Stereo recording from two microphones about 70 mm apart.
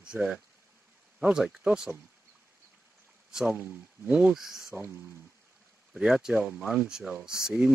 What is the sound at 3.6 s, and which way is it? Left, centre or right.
Speech, right.